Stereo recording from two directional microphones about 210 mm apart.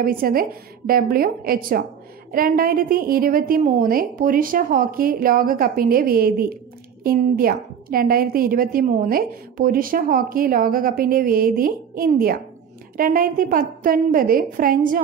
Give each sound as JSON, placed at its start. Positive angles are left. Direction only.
{"t": 0.0, "sound": "a woman's voice", "side_deg": -45}